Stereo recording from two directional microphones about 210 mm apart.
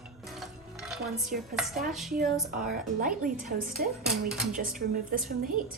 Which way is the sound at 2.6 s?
40° right (ahead or behind).